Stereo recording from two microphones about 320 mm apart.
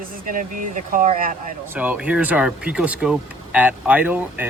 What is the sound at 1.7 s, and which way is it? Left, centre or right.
Speech, centre.